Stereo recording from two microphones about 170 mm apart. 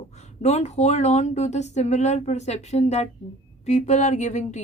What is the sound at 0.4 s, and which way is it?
Speech, 40° left (ahead or behind).